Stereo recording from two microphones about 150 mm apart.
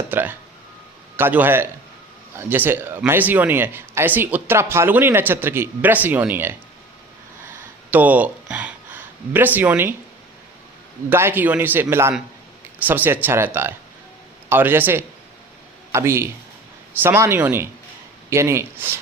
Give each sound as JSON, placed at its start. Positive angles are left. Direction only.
{"t": 0.1, "sound": "speech", "side_deg": -15}
{"t": 7.9, "sound": "a sound", "side_deg": -10}
{"t": 11.1, "sound": "speech", "side_deg": -15}